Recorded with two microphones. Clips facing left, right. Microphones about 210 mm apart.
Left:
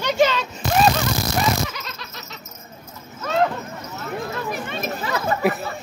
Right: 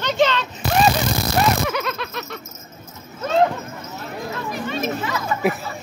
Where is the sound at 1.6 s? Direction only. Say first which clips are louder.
Right 11 dB; 55° right (ahead or behind).